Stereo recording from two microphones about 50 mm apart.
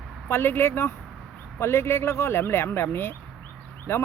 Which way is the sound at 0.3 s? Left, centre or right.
Left.